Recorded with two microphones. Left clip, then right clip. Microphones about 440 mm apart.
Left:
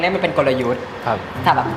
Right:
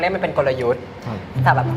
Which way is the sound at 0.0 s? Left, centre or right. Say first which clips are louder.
Left 2 dB; right.